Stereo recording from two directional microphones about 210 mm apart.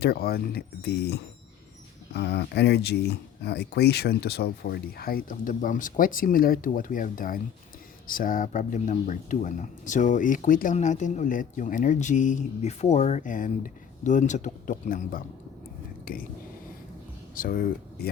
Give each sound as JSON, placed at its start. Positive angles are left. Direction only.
{"t": 0.0, "sound": "speech", "side_deg": 50}
{"t": 17.3, "sound": "speech", "side_deg": 40}